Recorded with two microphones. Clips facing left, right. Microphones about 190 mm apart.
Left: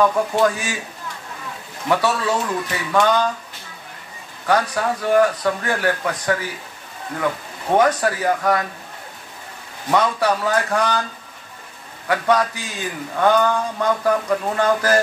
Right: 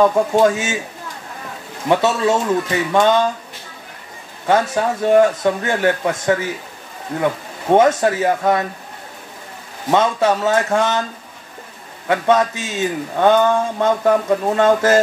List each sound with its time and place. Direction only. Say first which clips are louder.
0.0 s speech: right 4 dB; 25° right (ahead or behind)
1.9 s speech: right 4 dB; 25° right (ahead or behind)
4.5 s speech: right 3 dB; 25° right (ahead or behind)
7.7 s speech: right 4 dB; 25° right (ahead or behind)
9.8 s speech: right 3 dB; 25° right (ahead or behind)
12.1 s speech: right 3 dB; 25° right (ahead or behind)